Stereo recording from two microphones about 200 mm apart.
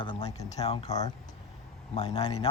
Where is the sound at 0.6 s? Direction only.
30° left (ahead or behind).